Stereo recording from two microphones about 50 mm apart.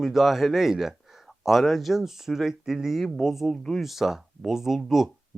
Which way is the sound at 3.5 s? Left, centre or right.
Centre.